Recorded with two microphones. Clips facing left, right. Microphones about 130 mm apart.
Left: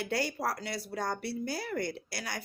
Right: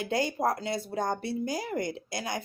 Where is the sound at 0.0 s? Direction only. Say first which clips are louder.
Right 4 dB; 20° right (ahead or behind).